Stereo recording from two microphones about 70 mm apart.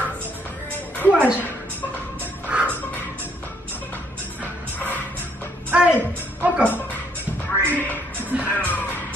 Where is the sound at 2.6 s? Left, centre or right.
Left.